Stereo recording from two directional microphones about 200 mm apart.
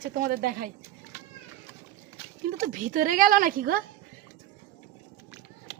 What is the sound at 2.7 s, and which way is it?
Speech, 40° right (ahead or behind).